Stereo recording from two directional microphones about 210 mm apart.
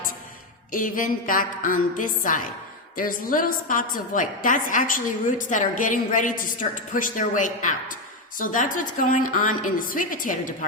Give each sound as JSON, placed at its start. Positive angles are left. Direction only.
{"t": 0.7, "sound": "a woman's voice", "side_deg": 40}